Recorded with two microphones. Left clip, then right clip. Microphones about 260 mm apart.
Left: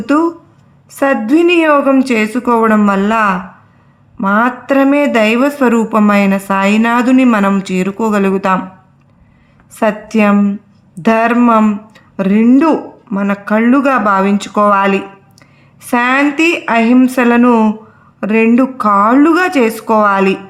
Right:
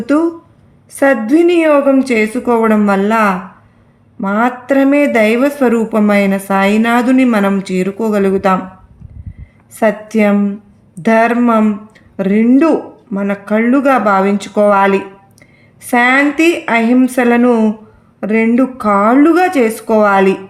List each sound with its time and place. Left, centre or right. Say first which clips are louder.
0.0 s speech: left 1 dB; left
9.7 s speech: even; left